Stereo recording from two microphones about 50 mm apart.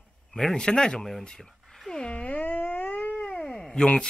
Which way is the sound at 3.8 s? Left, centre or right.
Left.